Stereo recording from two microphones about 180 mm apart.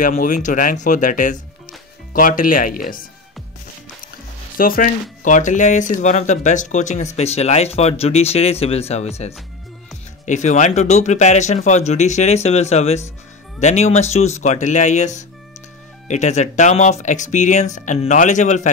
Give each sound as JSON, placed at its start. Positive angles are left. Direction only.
{"t": 0.0, "sound": "speech", "side_deg": 45}
{"t": 4.6, "sound": "speech", "side_deg": 50}